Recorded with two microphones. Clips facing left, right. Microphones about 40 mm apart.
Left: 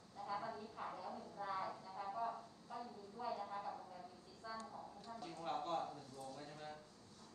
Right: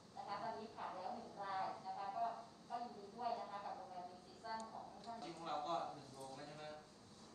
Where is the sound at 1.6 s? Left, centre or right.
Centre.